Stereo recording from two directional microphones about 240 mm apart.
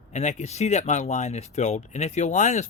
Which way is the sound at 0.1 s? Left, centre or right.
Left.